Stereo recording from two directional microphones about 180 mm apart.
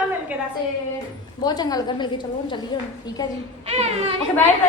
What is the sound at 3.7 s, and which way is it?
Speech, 35° right (ahead or behind).